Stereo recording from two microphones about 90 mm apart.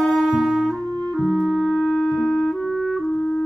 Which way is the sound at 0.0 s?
Centre (ahead or behind).